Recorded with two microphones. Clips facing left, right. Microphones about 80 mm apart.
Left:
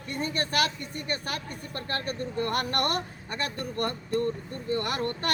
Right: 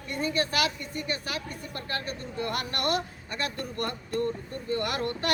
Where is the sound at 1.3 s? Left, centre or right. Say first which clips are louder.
Even; left.